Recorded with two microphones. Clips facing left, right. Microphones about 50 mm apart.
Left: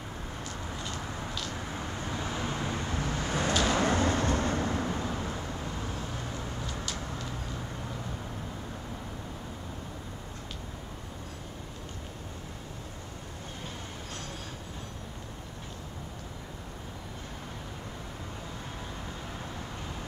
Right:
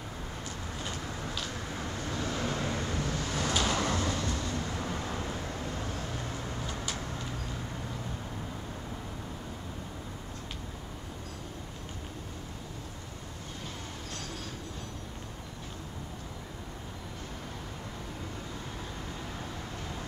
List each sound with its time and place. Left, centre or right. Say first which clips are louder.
1.7 s vehicle: even; centre
4.8 s vehicle: left 2 dB; centre